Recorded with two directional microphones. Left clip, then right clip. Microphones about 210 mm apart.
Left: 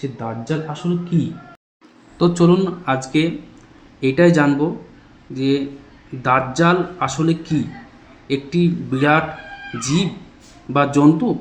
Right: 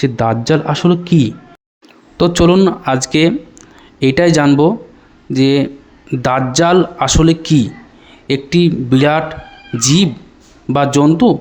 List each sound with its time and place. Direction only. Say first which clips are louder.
0.0 s speech: right 13 dB; 45° right (ahead or behind)